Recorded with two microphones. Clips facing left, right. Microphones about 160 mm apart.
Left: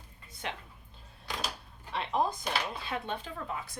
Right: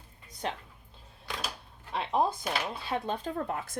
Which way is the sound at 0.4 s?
35° right (ahead or behind).